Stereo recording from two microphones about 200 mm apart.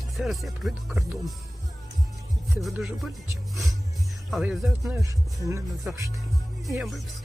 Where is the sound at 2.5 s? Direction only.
Centre (ahead or behind).